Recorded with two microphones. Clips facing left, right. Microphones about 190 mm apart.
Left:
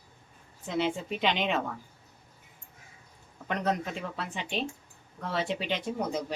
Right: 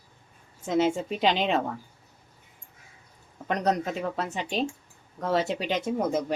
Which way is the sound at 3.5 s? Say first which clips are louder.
Right 4 dB; 40° right (ahead or behind).